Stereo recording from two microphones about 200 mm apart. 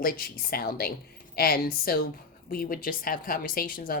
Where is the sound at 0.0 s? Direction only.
50° left (ahead or behind).